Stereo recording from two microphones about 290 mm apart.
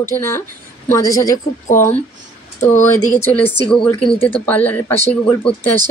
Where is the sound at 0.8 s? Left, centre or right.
Centre.